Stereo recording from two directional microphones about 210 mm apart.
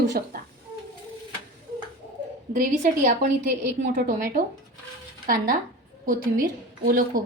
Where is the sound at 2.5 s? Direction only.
35° right (ahead or behind).